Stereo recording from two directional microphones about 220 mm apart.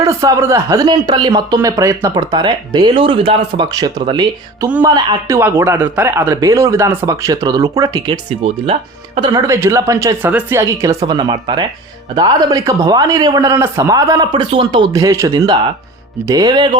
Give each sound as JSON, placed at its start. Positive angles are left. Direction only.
{"t": 0.0, "sound": "speech", "side_deg": -15}